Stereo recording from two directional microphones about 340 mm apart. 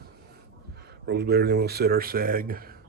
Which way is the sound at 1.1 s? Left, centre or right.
Right.